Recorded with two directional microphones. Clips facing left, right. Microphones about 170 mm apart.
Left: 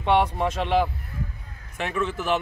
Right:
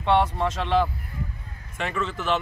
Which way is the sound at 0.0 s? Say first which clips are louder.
Even; 15° left (ahead or behind).